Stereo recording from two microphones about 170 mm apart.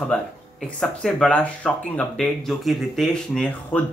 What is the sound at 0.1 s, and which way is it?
Speech, 5° left (ahead or behind).